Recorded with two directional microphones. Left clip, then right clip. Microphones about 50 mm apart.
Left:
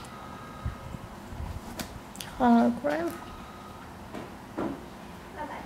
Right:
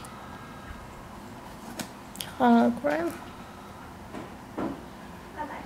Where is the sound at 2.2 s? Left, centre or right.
Centre.